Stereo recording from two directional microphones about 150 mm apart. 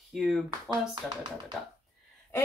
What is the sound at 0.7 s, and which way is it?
Speech, 30° right (ahead or behind).